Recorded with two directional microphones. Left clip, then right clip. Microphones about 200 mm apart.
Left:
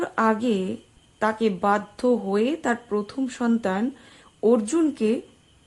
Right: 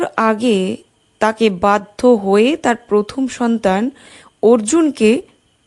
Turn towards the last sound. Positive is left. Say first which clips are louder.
# right 10 dB
turn(degrees=-30)  # may be behind; listen again after turning